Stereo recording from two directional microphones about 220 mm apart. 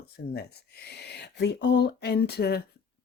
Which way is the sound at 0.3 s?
45° left (ahead or behind).